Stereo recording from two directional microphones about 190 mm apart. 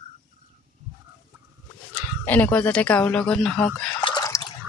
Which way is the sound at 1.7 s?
10° left (ahead or behind).